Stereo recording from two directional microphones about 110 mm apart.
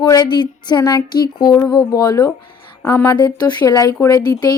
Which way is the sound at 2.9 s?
20° left (ahead or behind).